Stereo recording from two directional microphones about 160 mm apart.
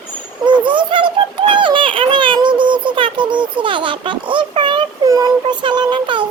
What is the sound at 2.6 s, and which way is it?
A child's voice, 30° right (ahead or behind).